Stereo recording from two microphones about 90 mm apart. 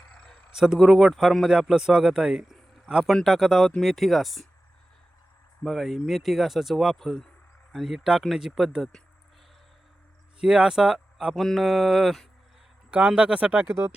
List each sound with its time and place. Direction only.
0.1 s a sound: 10° left (ahead or behind)
0.5 s a man's voice: 5° right (ahead or behind)
5.6 s a man's voice: centre (ahead or behind)
10.4 s a man's voice: 10° right (ahead or behind)
12.9 s speech: 15° right (ahead or behind)